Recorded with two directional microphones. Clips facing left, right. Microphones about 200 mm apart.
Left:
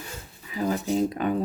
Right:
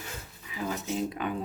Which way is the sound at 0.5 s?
40° left (ahead or behind).